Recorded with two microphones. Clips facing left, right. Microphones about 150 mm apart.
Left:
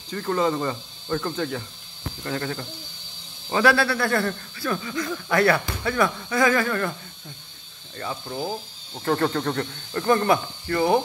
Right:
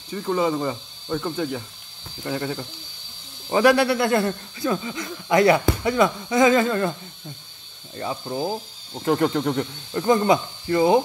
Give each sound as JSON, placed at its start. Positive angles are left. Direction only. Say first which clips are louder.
{"t": 0.1, "sound": "speech", "louder": "right 1 dB", "side_deg": -10}
{"t": 7.9, "sound": "speech", "louder": "right 3 dB", "side_deg": -20}